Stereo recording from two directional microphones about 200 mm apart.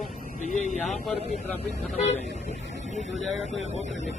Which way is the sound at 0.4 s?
35° left (ahead or behind).